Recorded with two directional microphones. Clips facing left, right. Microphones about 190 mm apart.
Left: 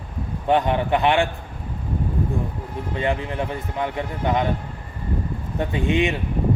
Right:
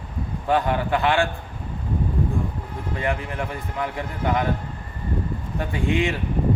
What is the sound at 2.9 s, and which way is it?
Speech, 20° left (ahead or behind).